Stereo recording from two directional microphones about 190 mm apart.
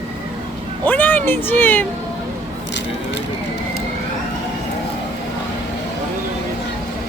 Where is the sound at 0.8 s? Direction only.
10° left (ahead or behind).